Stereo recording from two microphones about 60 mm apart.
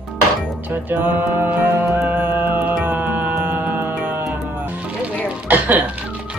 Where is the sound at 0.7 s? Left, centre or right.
Right.